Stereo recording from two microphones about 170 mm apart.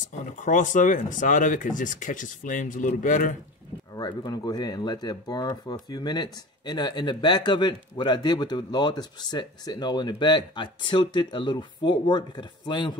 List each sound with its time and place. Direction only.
0.4 s speech: 50° left (ahead or behind)
3.9 s speech: 25° left (ahead or behind)